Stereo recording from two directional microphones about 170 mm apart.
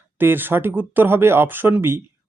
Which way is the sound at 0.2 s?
10° right (ahead or behind).